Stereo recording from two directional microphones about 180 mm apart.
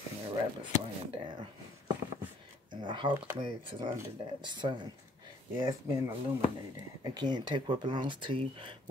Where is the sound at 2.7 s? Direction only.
25° right (ahead or behind).